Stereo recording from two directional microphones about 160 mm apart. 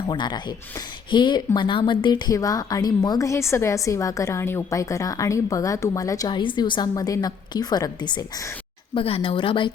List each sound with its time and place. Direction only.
0.1 s a woman's voice: 30° left (ahead or behind)